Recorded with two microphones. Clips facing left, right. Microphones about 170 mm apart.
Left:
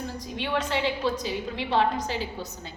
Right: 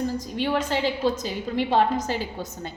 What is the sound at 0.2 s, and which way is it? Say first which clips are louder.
A woman's voice: right 4 dB; 45° right (ahead or behind).